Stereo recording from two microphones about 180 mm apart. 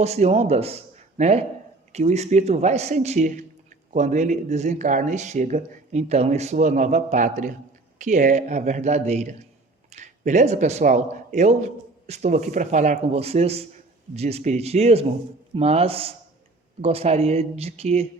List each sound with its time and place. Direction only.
0.0 s speech: 35° right (ahead or behind)